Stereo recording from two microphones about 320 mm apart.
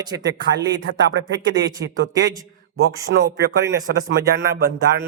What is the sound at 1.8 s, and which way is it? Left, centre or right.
Speech, right.